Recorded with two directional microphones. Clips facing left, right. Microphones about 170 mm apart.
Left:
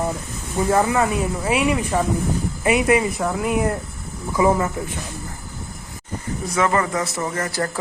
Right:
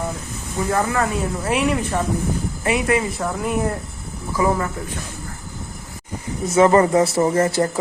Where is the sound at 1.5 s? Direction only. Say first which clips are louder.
Even; 5° left (ahead or behind).